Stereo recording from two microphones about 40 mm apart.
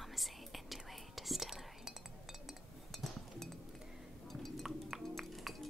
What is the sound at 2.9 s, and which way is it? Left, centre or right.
Chink, centre.